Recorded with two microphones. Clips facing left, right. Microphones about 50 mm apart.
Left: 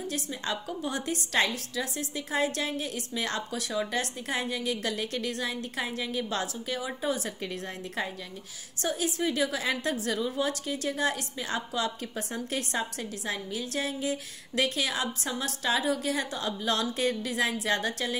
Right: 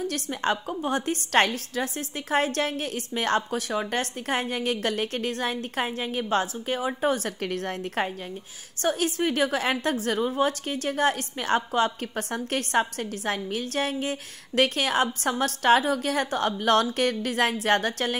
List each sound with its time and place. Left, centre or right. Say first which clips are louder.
0.0 s a woman's voice: right 6 dB; right
7.0 s a woman's voice: right 5 dB; right